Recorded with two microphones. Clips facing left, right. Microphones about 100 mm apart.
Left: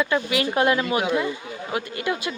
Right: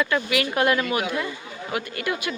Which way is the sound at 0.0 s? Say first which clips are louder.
Left 1 dB; 25° left (ahead or behind).